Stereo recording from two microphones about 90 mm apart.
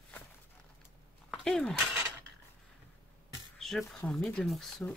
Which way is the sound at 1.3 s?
5° left (ahead or behind).